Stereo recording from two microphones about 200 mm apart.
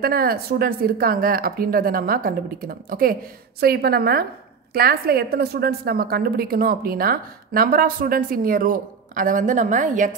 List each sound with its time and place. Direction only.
0.0 s a woman's voice: 50° right (ahead or behind)